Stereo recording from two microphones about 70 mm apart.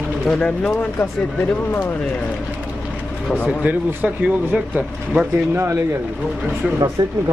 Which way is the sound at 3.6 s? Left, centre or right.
Centre.